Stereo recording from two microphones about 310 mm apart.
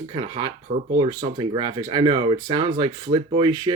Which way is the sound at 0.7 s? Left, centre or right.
Right.